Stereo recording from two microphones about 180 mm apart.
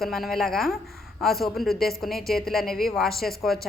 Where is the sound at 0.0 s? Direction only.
Centre (ahead or behind).